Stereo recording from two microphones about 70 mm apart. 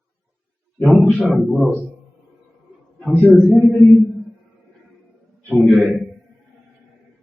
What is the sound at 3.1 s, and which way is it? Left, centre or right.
Speech, centre.